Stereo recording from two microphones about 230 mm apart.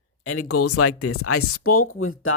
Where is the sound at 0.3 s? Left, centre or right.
Left.